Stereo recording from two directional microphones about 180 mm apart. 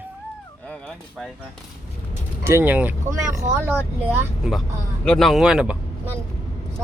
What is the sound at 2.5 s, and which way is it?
Speech, 10° right (ahead or behind).